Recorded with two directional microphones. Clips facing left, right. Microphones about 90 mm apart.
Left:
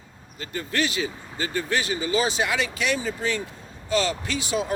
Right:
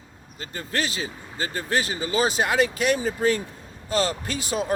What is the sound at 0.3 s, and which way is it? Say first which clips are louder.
Speech: left 2 dB; 35° right (ahead or behind).